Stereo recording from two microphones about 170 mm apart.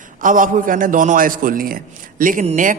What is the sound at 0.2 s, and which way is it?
A man's voice, 50° right (ahead or behind).